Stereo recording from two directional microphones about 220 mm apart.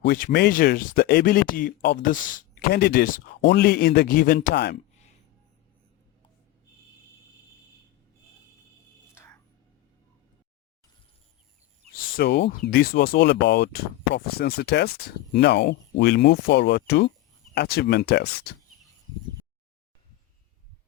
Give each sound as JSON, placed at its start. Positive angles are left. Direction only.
{"t": 0.0, "sound": "speech", "side_deg": 40}
{"t": 9.1, "sound": "whispering", "side_deg": 10}
{"t": 11.9, "sound": "speech", "side_deg": 45}